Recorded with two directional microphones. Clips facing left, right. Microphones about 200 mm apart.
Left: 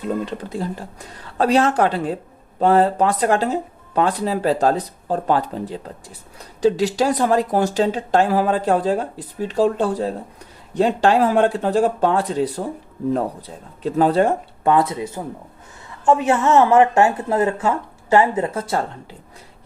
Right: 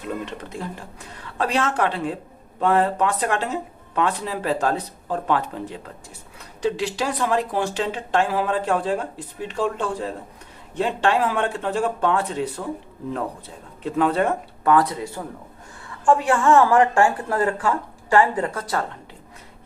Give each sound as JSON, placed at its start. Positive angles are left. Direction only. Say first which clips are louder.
{"t": 0.1, "sound": "speech", "louder": "left 5 dB", "side_deg": 35}
{"t": 13.8, "sound": "speech", "louder": "left 4 dB", "side_deg": 35}